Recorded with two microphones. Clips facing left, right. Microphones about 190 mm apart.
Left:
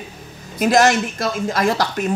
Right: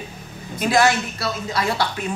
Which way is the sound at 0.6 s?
45° left (ahead or behind).